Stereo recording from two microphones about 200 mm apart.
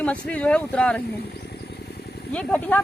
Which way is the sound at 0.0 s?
5° left (ahead or behind).